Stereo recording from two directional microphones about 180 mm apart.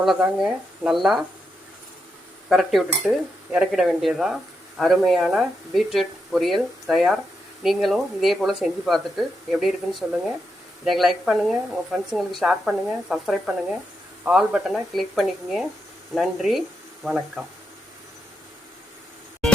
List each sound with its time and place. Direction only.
0.0 s speech: centre (ahead or behind)
2.5 s speech: centre (ahead or behind)